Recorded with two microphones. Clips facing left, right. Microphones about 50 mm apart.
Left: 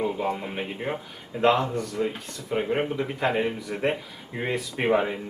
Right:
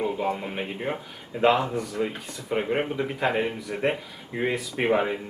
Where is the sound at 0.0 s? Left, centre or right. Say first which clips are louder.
Even; centre.